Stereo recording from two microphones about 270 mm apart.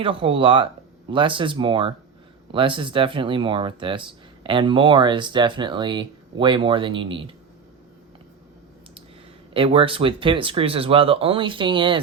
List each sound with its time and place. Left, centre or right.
0.0 s speech: centre
9.5 s speech: centre